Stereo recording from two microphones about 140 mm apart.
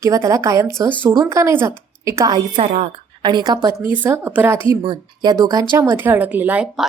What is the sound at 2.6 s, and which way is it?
Speech, 50° right (ahead or behind).